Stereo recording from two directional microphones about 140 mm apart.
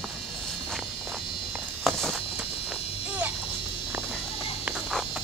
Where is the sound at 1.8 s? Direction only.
Centre (ahead or behind).